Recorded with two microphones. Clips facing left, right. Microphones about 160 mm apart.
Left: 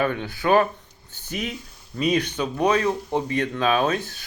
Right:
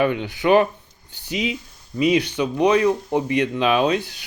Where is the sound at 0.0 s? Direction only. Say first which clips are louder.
Right 4 dB; 20° right (ahead or behind).